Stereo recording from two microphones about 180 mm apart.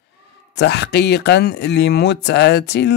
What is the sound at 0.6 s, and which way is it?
Speech, 70° left (ahead or behind).